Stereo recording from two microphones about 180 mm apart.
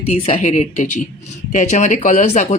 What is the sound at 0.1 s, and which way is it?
Speech, 35° left (ahead or behind).